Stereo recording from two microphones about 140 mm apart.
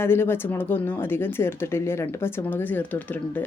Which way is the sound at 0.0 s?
15° left (ahead or behind).